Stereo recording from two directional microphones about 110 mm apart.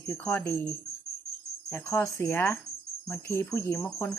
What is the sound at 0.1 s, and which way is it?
Speech, 20° left (ahead or behind).